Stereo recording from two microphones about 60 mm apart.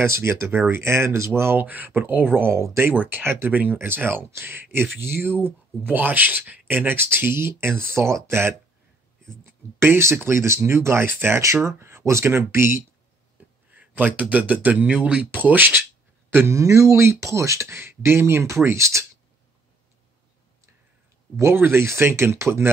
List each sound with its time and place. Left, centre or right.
0.0 s speech: right
2.5 s speech: right
2.9 s speech: right
5.9 s speech: right
13.7 s a sound: right
14.3 s a man's voice: right
16.5 s speech: right
21.4 s speech: right